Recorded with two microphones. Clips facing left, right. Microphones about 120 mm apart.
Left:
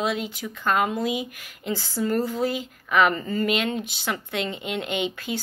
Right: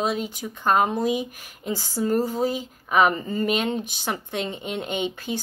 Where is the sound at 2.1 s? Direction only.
45° right (ahead or behind).